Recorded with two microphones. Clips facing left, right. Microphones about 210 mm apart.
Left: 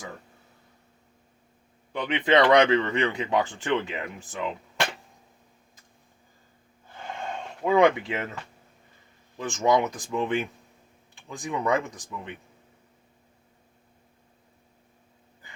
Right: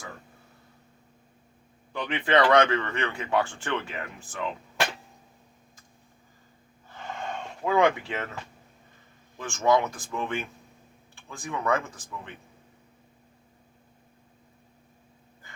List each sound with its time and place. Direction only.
1.9 s speech: 20° left (ahead or behind)
7.6 s speech: 20° left (ahead or behind)
9.5 s speech: 15° left (ahead or behind)